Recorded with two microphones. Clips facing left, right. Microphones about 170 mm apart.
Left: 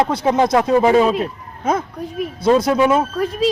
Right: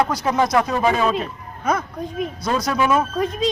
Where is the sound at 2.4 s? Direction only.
25° left (ahead or behind).